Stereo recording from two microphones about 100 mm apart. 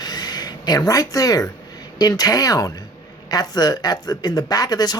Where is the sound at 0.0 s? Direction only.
40° left (ahead or behind).